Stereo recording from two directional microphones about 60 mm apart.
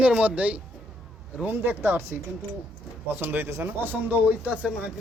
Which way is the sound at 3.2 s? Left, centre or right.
Right.